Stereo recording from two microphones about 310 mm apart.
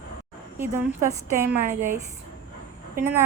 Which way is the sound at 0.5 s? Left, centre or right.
Centre.